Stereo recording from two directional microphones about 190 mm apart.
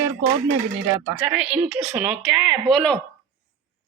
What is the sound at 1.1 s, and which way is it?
Speech, 5° right (ahead or behind).